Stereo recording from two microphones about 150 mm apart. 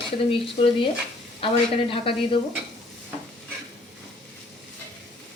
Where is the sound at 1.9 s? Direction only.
35° left (ahead or behind).